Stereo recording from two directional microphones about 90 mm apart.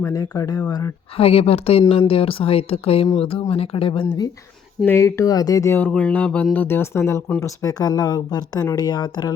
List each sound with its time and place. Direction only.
0.1 s speech: 40° left (ahead or behind)
1.1 s speech: 90° left
4.9 s speech: 30° left (ahead or behind)
5.9 s speech: 15° left (ahead or behind); by 7.2 s 30° left (ahead or behind)
7.4 s speech: 40° left (ahead or behind)